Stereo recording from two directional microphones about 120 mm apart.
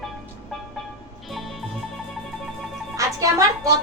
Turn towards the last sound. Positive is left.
turn(degrees=-30)  # may be behind; listen again after turning